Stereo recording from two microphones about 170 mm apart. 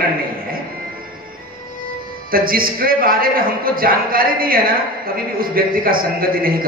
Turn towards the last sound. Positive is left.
turn(degrees=-60)  # may be behind; listen again after turning